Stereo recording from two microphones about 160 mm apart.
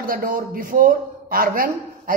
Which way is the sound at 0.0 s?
60° right (ahead or behind).